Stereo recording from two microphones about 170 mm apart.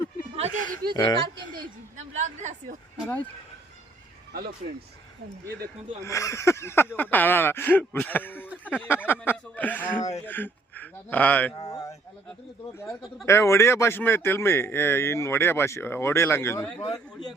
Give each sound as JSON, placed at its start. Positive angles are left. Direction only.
{"t": 0.7, "sound": "a sound", "side_deg": -65}
{"t": 0.9, "sound": "speech", "side_deg": 25}
{"t": 1.5, "sound": "a sound", "side_deg": -45}
{"t": 4.3, "sound": "speech", "side_deg": -65}
{"t": 6.1, "sound": "a man's voice", "side_deg": 20}
{"t": 8.4, "sound": "a sound", "side_deg": -10}
{"t": 8.9, "sound": "a man's voice", "side_deg": 10}
{"t": 11.5, "sound": "speech", "side_deg": 20}
{"t": 13.2, "sound": "a man's voice", "side_deg": 15}